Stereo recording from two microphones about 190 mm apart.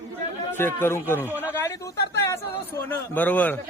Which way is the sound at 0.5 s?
10° left (ahead or behind).